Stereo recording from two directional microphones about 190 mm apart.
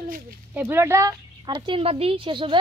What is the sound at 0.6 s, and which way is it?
A woman's voice, 10° right (ahead or behind).